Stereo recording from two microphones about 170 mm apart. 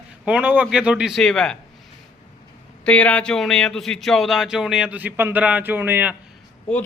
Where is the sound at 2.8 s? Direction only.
10° left (ahead or behind); by 6.1 s 10° right (ahead or behind).